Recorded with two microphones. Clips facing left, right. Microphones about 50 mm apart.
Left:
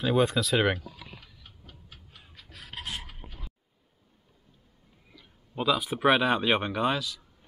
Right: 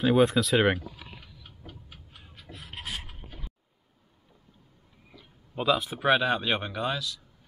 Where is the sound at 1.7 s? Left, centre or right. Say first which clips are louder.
Right 4 dB; centre.